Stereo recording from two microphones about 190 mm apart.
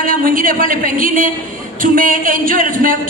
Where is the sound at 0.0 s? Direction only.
45° right (ahead or behind).